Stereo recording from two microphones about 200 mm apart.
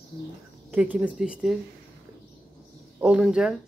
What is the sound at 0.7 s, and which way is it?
Speech, 5° right (ahead or behind).